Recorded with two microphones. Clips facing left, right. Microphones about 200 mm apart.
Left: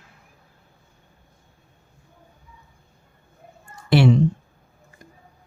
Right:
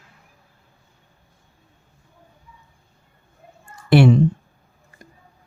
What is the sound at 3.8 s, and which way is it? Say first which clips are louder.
Speech: right 3 dB; 55° right (ahead or behind).